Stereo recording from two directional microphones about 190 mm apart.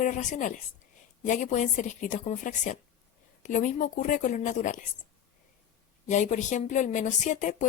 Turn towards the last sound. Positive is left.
turn(degrees=40)  # may be behind; listen again after turning